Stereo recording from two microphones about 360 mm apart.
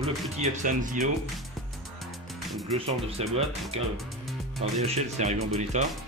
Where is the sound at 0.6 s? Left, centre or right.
Right.